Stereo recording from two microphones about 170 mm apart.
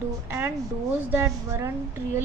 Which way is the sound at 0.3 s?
15° right (ahead or behind).